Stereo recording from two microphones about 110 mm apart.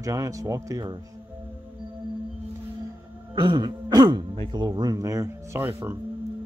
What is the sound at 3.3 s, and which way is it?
Throat clearing, 45° right (ahead or behind).